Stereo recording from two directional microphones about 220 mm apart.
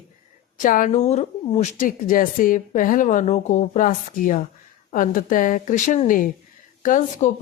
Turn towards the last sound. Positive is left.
turn(degrees=35)  # may be behind; listen again after turning